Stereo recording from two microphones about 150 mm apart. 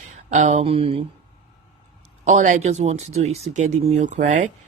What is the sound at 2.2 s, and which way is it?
Speech, 55° right (ahead or behind).